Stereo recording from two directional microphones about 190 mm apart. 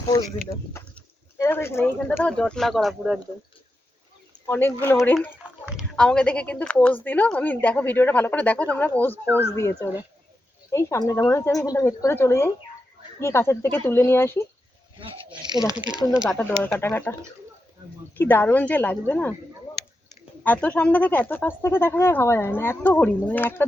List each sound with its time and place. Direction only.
0.1 s speech: 15° left (ahead or behind); by 3.2 s centre (ahead or behind)
4.4 s speech: 10° left (ahead or behind)
5.4 s a sound: 5° right (ahead or behind)
6.0 s speech: 5° left (ahead or behind)
14.9 s speech: 25° right (ahead or behind)
16.1 s speech: 5° right (ahead or behind)
16.4 s speech: 10° left (ahead or behind)
18.2 s speech: 10° left (ahead or behind)
20.4 s speech: 10° left (ahead or behind)